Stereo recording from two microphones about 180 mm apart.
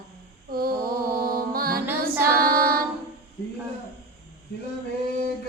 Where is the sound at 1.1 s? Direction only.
55° right (ahead or behind).